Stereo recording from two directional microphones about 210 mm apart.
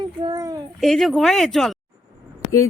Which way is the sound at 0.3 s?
15° right (ahead or behind).